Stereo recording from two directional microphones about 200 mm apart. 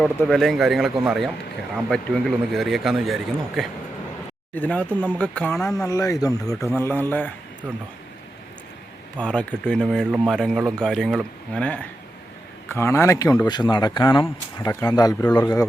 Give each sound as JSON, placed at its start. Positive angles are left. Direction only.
{"t": 0.0, "sound": "speech", "side_deg": 0}
{"t": 2.5, "sound": "speech", "side_deg": 0}
{"t": 5.7, "sound": "speech", "side_deg": 15}
{"t": 9.1, "sound": "speech", "side_deg": 5}